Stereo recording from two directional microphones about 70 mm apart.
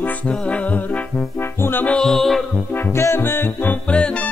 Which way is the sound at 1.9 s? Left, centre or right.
Centre.